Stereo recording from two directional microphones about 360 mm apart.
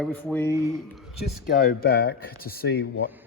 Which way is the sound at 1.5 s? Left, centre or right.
Left.